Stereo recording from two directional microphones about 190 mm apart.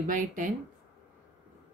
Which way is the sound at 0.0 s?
45° right (ahead or behind).